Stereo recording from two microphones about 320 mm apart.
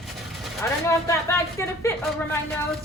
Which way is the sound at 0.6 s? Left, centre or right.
Centre.